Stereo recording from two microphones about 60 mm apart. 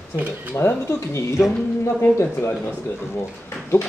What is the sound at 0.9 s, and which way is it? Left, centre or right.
Speech, left.